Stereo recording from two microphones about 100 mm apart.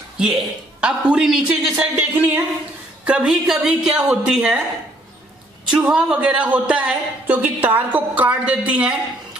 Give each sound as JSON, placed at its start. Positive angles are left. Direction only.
{"t": 0.2, "sound": "speech", "side_deg": -10}
{"t": 2.0, "sound": "a woman's voice", "side_deg": -15}
{"t": 5.7, "sound": "speech", "side_deg": -10}